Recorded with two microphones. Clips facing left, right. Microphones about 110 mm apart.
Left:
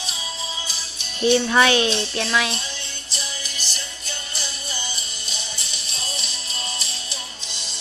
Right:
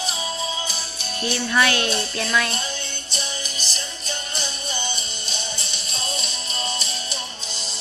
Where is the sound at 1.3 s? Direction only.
25° left (ahead or behind).